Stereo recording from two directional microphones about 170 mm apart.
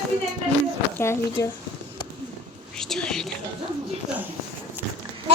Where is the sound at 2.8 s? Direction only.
5° left (ahead or behind).